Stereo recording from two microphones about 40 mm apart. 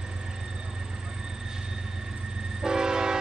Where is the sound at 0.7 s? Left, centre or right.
Centre.